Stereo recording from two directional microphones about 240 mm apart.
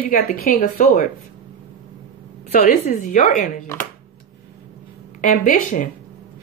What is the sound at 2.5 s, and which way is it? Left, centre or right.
Speech, left.